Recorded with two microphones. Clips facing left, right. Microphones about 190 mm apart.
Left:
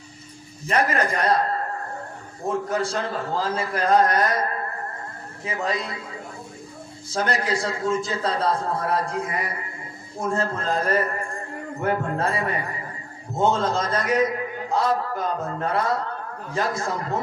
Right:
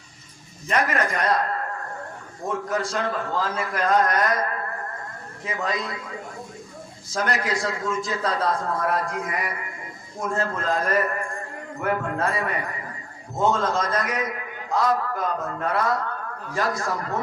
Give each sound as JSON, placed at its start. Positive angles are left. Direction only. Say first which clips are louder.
{"t": 0.7, "sound": "a man's voice", "louder": "left 1 dB", "side_deg": 35}
{"t": 13.5, "sound": "a man's voice", "louder": "even", "side_deg": 30}